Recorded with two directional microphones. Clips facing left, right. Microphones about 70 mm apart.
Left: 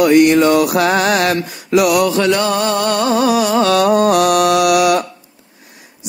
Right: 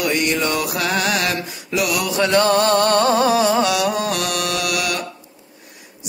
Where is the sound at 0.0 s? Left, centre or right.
Centre.